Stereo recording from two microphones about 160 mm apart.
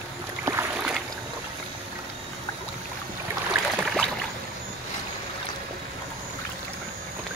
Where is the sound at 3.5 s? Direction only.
5° right (ahead or behind).